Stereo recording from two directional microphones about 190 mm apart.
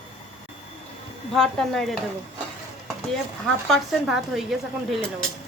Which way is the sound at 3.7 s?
Centre (ahead or behind).